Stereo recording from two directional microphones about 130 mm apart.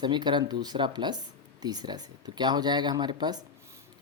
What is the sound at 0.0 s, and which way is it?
Speech, 35° right (ahead or behind).